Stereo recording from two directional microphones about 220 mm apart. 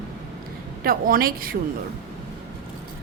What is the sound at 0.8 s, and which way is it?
Speech, 40° right (ahead or behind).